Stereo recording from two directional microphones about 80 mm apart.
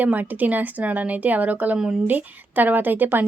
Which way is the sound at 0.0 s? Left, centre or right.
Right.